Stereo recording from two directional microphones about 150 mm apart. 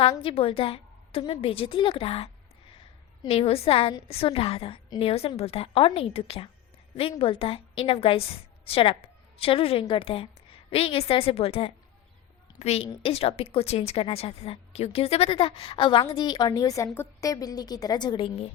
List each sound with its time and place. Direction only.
0.0 s a woman's voice: 40° left (ahead or behind)